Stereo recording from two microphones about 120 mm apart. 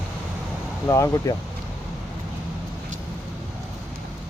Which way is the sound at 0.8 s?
25° left (ahead or behind).